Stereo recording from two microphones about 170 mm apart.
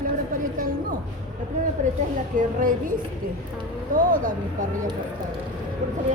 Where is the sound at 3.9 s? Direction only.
50° right (ahead or behind).